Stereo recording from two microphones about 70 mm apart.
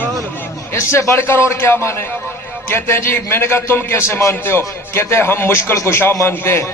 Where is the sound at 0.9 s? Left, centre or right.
Left.